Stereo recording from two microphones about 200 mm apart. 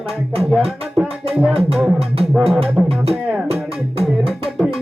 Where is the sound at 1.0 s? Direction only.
5° right (ahead or behind).